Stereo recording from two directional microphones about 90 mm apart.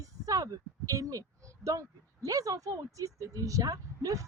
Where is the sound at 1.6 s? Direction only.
40° right (ahead or behind).